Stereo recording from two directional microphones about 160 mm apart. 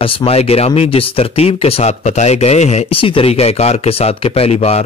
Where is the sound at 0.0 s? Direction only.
35° left (ahead or behind).